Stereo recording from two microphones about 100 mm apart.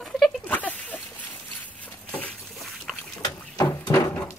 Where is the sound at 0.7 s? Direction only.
15° left (ahead or behind).